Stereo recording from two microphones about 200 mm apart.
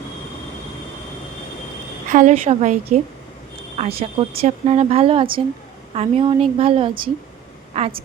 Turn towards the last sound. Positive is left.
turn(degrees=-30)  # may be behind; listen again after turning